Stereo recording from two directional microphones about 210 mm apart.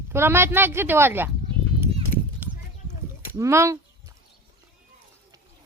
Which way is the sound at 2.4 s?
5° right (ahead or behind).